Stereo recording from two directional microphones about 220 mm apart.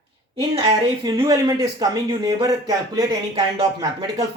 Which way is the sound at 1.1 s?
15° right (ahead or behind).